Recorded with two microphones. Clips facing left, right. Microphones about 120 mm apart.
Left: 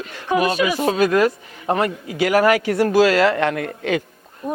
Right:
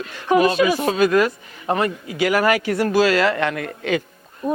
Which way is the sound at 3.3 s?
40° left (ahead or behind).